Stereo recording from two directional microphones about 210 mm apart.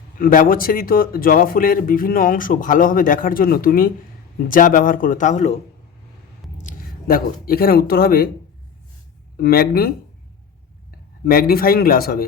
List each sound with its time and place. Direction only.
0.2 s speech: 40° left (ahead or behind)
6.6 s speech: 40° left (ahead or behind)
9.4 s speech: 45° left (ahead or behind)
11.3 s speech: 45° left (ahead or behind)